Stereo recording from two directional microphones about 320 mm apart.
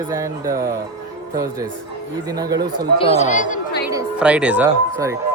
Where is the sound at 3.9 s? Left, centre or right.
Centre.